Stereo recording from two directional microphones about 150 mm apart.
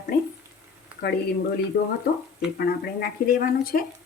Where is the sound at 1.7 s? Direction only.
90° left; by 3.8 s 75° left (ahead or behind).